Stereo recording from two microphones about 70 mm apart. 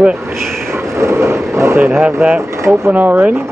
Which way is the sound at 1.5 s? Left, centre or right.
Right.